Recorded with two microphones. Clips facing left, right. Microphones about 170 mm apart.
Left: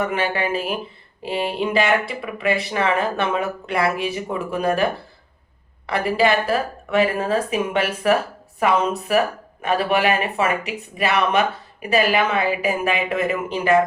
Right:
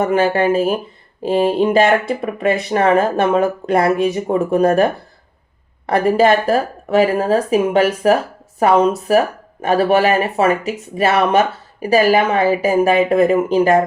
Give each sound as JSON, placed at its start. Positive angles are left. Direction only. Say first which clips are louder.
{"t": 0.0, "sound": "speech", "louder": "right 8 dB", "side_deg": -40}